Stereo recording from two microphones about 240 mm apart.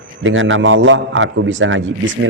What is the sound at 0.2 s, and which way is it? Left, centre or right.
A man's voice, right.